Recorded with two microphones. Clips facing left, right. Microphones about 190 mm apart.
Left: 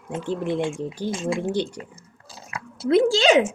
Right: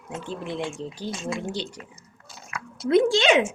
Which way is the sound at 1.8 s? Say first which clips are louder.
Left 5 dB; 30° left (ahead or behind).